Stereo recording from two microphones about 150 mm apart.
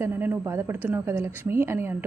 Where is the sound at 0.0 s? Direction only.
15° right (ahead or behind).